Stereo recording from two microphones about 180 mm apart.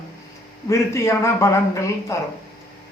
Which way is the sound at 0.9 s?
15° left (ahead or behind).